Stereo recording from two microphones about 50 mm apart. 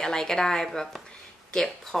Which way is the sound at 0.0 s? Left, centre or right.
Centre.